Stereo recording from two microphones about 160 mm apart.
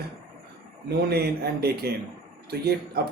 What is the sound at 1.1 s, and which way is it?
Speech, 80° right.